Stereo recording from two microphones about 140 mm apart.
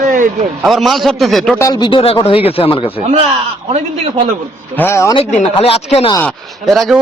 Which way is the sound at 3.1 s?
50° right (ahead or behind).